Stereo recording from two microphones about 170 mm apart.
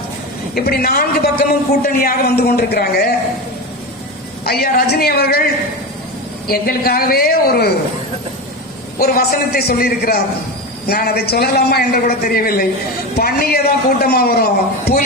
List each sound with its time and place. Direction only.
0.5 s a man's voice: 65° left (ahead or behind)
4.4 s a man's voice: 65° left (ahead or behind)
6.5 s a man's voice: 60° left (ahead or behind)
9.0 s a man's voice: 65° left (ahead or behind)